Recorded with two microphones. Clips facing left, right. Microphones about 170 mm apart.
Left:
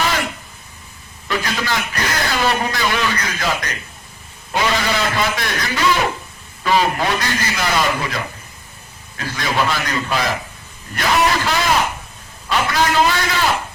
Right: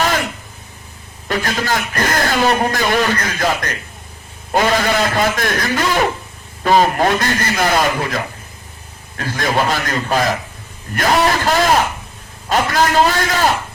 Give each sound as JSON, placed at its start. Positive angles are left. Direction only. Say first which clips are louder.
{"t": 1.3, "sound": "a man's voice", "louder": "right 3 dB", "side_deg": -45}